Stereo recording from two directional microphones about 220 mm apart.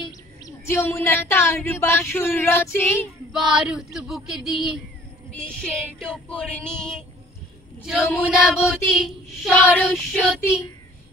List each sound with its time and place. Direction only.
0.7 s speech: 10° left (ahead or behind)
3.3 s child singing: centre (ahead or behind)